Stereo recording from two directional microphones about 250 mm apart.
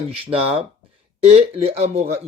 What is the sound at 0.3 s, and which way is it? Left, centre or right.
A man's voice, right.